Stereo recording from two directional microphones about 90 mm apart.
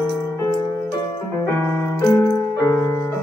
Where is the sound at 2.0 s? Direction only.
35° left (ahead or behind).